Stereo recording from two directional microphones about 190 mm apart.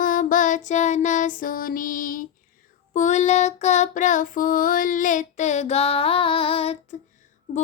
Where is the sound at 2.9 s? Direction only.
40° left (ahead or behind).